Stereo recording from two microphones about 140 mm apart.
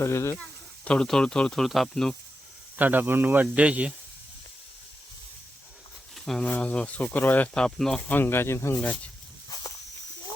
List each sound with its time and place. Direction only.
0.0 s speech: 20° left (ahead or behind)
0.9 s speech: 5° left (ahead or behind)
2.7 s speech: 10° right (ahead or behind)
6.1 s speech: 5° left (ahead or behind); by 8.8 s 20° left (ahead or behind)